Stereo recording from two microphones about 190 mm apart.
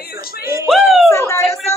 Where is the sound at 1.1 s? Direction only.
15° left (ahead or behind).